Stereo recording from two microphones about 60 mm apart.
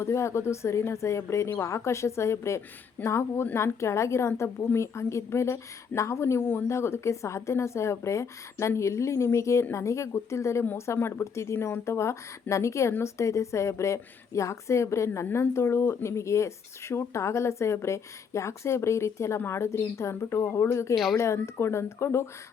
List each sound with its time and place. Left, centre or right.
0.0 s a woman's voice: left
20.9 s speech: centre
21.3 s a woman's voice: left